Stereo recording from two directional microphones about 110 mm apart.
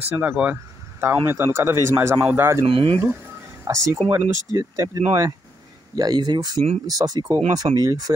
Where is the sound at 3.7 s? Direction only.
25° right (ahead or behind).